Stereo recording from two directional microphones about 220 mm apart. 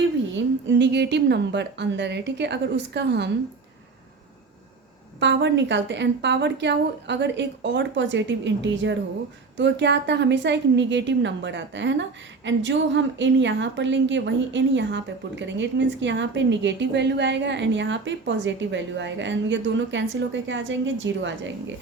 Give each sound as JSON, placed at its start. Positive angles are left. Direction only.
{"t": 0.3, "sound": "a woman's voice", "side_deg": -55}
{"t": 5.2, "sound": "a woman's voice", "side_deg": -55}